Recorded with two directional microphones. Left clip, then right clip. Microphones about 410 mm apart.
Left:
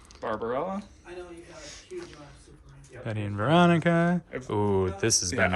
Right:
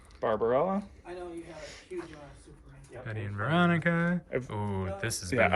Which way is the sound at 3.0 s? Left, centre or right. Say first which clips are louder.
Left 6 dB; centre.